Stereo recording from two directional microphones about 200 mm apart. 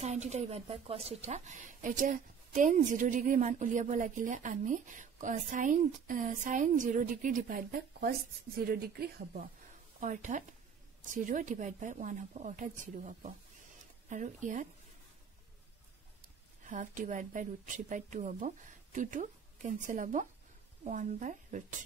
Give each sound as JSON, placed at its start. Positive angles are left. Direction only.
{"t": 0.0, "sound": "a woman's voice", "side_deg": -35}
{"t": 16.6, "sound": "a woman's voice", "side_deg": -40}